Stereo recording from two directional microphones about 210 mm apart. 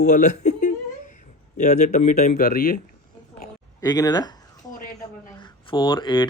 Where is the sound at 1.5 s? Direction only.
35° left (ahead or behind).